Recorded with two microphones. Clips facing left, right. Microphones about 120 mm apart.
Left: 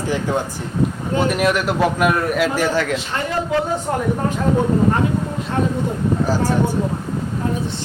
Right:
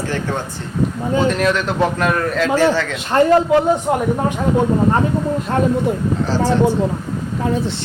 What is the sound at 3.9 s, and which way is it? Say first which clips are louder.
Speech: right 4 dB; 15° right (ahead or behind).